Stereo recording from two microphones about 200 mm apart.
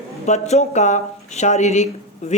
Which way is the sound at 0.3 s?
35° left (ahead or behind).